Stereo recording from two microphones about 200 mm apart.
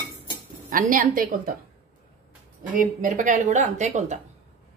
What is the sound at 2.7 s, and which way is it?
A woman's voice, 40° right (ahead or behind).